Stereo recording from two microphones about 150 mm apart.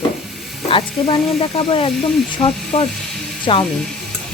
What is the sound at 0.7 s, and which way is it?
A woman's voice, 35° left (ahead or behind).